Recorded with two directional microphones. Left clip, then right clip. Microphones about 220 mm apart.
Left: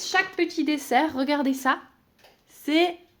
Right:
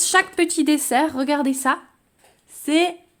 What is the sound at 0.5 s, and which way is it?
A woman's voice, 30° right (ahead or behind).